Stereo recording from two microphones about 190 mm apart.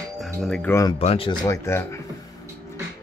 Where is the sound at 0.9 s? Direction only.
30° left (ahead or behind); by 1.9 s 15° left (ahead or behind).